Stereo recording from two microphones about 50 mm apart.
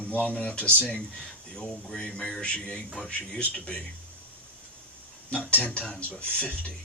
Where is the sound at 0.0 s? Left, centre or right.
Left.